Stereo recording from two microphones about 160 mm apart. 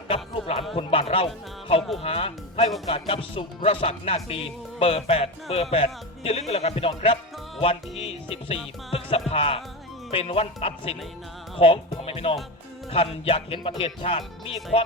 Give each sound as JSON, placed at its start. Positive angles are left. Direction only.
{"t": 0.1, "sound": "music", "side_deg": 35}
{"t": 0.8, "sound": "speech", "side_deg": 35}
{"t": 8.9, "sound": "music", "side_deg": 35}
{"t": 9.3, "sound": "speech", "side_deg": 35}